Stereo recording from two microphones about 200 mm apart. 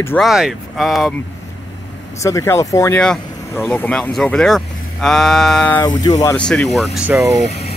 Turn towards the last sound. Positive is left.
turn(degrees=-10)  # may be behind; listen again after turning